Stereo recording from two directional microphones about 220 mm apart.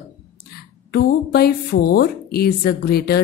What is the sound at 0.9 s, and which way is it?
A woman's voice, 45° left (ahead or behind).